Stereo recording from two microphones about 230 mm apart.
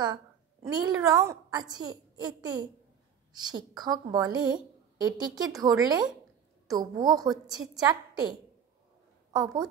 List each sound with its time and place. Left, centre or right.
0.0 s a woman's voice: centre
9.3 s a woman's voice: centre